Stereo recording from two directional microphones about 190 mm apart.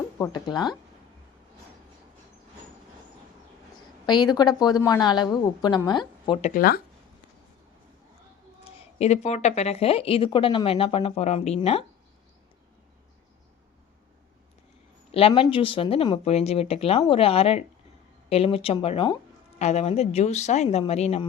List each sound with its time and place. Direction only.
0.2 s a woman's voice: 20° left (ahead or behind)
3.8 s a woman's voice: 20° left (ahead or behind)
6.5 s speech: 50° left (ahead or behind)
9.0 s a woman's voice: 35° left (ahead or behind)
15.1 s a woman's voice: 30° left (ahead or behind)